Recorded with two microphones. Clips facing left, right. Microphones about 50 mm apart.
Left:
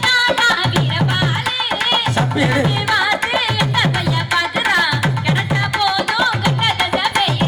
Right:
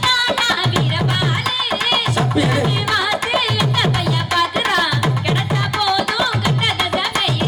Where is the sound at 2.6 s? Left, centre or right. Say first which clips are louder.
Left 2 dB; centre.